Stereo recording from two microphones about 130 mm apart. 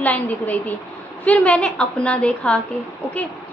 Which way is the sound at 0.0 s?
10° left (ahead or behind).